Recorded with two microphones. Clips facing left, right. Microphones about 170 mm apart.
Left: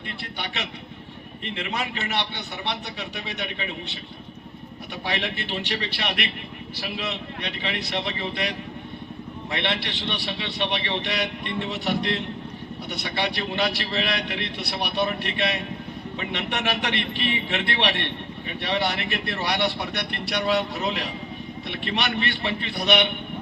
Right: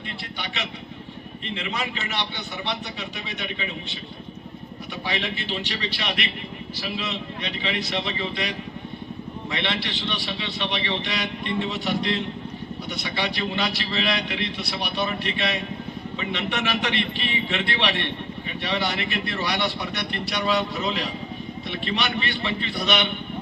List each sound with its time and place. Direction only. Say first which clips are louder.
1.5 s a man's voice: even; 60° left (ahead or behind)
3.2 s a man's voice: even; 65° left (ahead or behind)
5.0 s a man's voice: even; 60° left (ahead or behind)